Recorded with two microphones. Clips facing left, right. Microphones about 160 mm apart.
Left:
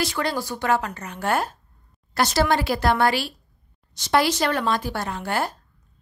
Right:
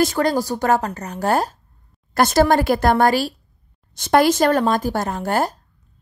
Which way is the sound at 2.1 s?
50° right (ahead or behind).